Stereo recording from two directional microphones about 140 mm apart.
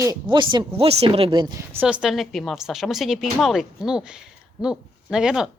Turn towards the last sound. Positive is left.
turn(degrees=-5)  # may be behind; listen again after turning